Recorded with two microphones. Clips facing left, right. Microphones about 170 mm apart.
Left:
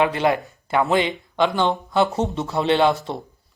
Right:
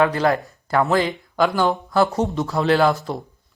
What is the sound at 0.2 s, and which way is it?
Speech, 20° left (ahead or behind).